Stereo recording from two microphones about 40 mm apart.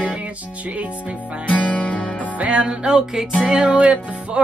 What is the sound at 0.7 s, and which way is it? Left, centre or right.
Music, right.